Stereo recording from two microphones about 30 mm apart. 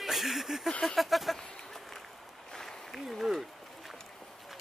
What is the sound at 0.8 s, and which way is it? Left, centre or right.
Speech, centre.